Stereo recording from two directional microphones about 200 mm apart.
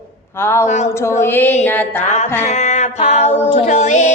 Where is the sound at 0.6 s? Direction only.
35° left (ahead or behind).